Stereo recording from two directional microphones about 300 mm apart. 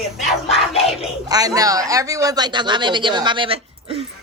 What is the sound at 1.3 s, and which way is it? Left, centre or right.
Speech, centre.